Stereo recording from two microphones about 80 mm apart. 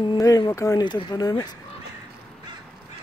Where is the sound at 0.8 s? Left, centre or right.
Left.